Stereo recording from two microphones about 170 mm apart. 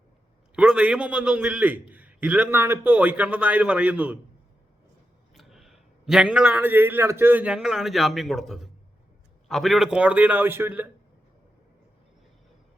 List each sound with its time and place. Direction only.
0.5 s a man's voice: 10° right (ahead or behind)
5.3 s a man's voice: centre (ahead or behind)